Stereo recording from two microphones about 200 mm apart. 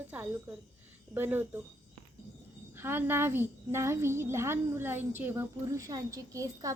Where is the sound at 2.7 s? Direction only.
10° right (ahead or behind).